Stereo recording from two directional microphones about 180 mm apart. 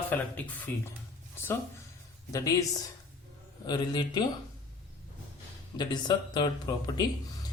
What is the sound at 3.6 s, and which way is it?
Speech, 25° left (ahead or behind).